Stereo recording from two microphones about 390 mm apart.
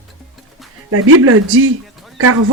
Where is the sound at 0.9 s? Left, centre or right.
Right.